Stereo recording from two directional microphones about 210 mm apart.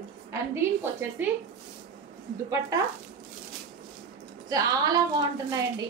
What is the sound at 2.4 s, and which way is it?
Speech, 15° right (ahead or behind).